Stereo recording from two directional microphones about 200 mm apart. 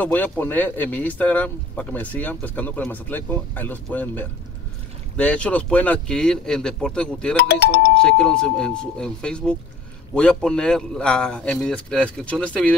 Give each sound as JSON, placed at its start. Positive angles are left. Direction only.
{"t": 0.0, "sound": "a man's voice", "side_deg": 10}
{"t": 7.3, "sound": "speech", "side_deg": 55}
{"t": 8.0, "sound": "a man's voice", "side_deg": 5}